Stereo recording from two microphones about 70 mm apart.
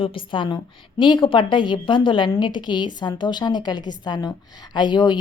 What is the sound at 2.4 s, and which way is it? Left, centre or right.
A woman's voice, left.